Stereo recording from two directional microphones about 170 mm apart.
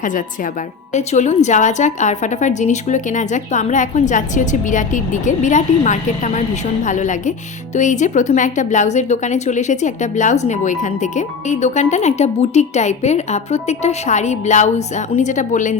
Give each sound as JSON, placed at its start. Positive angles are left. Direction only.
{"t": 0.0, "sound": "speech", "side_deg": 50}